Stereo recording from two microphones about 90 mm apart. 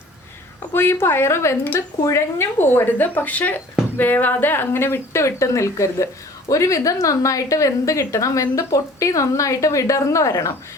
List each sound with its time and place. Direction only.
0.7 s a woman's voice: 25° left (ahead or behind)